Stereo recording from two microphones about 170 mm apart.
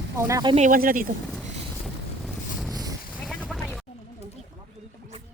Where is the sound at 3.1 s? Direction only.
Centre (ahead or behind).